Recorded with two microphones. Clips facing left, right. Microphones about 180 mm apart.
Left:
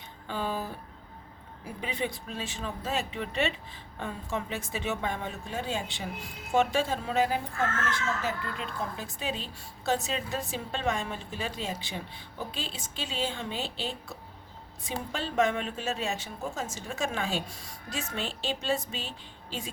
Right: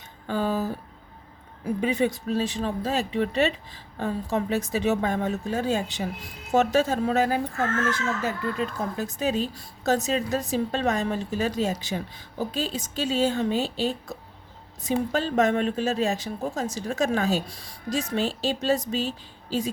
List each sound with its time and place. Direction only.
0.3 s a woman's voice: 40° right (ahead or behind)
1.8 s a woman's voice: 45° right (ahead or behind)